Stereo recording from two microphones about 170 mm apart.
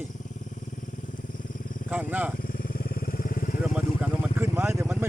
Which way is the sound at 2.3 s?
55° left (ahead or behind).